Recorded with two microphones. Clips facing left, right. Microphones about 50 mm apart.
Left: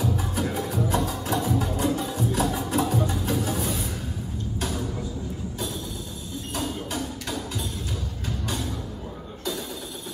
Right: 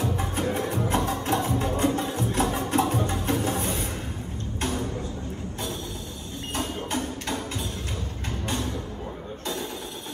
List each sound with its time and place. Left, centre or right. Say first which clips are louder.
0.0 s music: even; right
4.6 s a sound: right 2 dB; right
6.5 s music: right 1 dB; right
8.5 s music: right 2 dB; right